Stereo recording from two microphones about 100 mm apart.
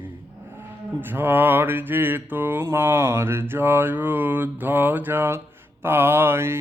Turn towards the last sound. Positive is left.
turn(degrees=-25)  # may be behind; listen again after turning